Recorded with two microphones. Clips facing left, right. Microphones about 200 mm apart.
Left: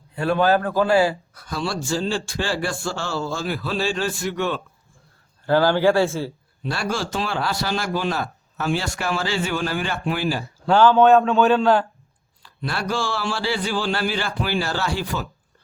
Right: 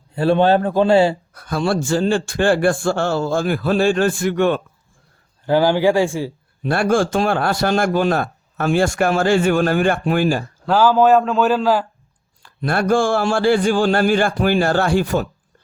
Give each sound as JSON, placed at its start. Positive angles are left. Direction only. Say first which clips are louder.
{"t": 0.2, "sound": "speech", "louder": "right 4 dB", "side_deg": -30}
{"t": 1.3, "sound": "speech", "louder": "right 7 dB", "side_deg": -55}
{"t": 5.5, "sound": "speech", "louder": "right 2 dB", "side_deg": -15}
{"t": 6.6, "sound": "speech", "louder": "right 9 dB", "side_deg": -55}
{"t": 10.7, "sound": "a man's voice", "louder": "right 1 dB", "side_deg": -5}
{"t": 12.4, "sound": "speech", "louder": "right 8 dB", "side_deg": -50}